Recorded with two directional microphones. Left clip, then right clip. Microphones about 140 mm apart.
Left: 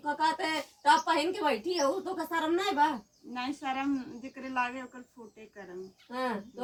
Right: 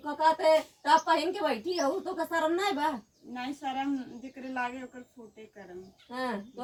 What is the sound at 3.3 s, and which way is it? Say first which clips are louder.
Speech: even; 30° right (ahead or behind).